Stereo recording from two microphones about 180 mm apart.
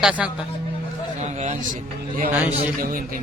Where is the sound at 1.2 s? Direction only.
40° right (ahead or behind).